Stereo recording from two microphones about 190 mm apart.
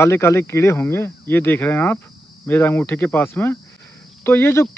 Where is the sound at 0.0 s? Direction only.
15° left (ahead or behind).